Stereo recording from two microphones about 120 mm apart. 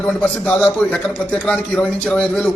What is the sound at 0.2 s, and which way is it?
A man's voice, 10° left (ahead or behind).